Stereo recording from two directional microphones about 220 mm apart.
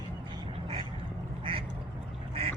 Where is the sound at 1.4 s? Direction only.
25° right (ahead or behind).